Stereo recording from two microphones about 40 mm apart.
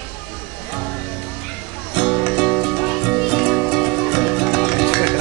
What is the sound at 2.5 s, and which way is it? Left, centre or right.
Music, centre.